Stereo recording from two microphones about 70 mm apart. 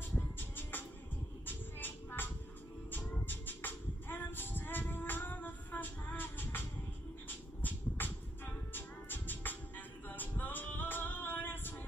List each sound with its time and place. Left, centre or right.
0.4 s music: left
1.4 s a sound: left
2.9 s music: left